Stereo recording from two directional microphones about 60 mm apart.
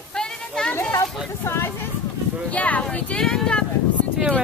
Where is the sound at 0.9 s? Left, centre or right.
Left.